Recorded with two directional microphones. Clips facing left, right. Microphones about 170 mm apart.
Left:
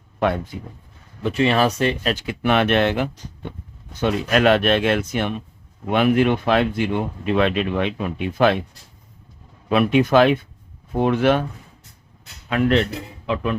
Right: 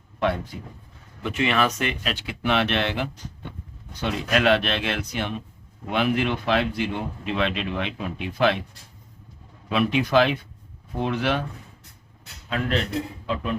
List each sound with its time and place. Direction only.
1.2 s speech: 35° left (ahead or behind); by 8.6 s 50° left (ahead or behind)
9.6 s speech: 50° left (ahead or behind)
12.5 s speech: 65° left (ahead or behind)